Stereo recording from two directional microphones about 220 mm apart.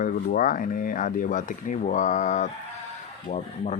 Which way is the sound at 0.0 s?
40° left (ahead or behind).